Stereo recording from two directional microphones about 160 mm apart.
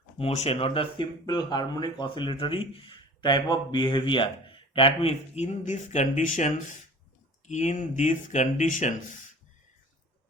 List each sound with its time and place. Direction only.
0.2 s speech: 40° left (ahead or behind)